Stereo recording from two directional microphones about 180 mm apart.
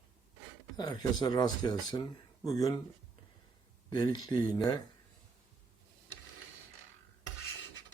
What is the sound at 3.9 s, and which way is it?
Speech, 20° left (ahead or behind).